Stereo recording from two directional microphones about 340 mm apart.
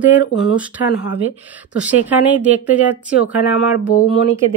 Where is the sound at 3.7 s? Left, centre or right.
Left.